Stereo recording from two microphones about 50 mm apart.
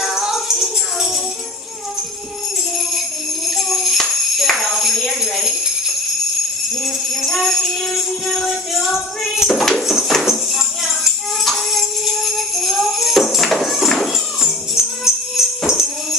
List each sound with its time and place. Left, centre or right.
0.0 s music: centre
3.4 s music: centre
5.2 s jingle bell: centre
9.8 s tambourine: centre
10.2 s music: centre